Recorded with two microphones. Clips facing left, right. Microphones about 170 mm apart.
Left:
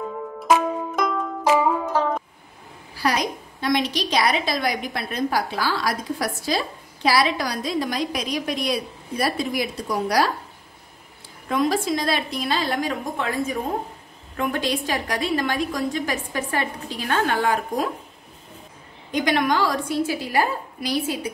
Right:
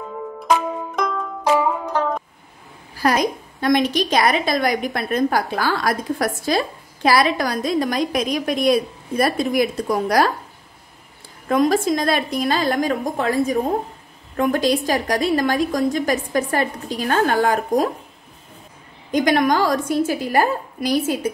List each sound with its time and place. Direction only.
0.0 s music: 5° left (ahead or behind)
3.0 s a woman's voice: 50° right (ahead or behind)
11.4 s a woman's voice: 45° right (ahead or behind)
19.1 s a woman's voice: 45° right (ahead or behind)